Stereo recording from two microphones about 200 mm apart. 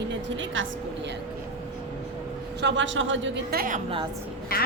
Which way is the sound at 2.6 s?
65° right (ahead or behind).